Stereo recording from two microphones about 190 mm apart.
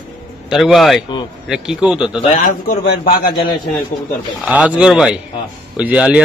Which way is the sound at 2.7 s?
50° left (ahead or behind).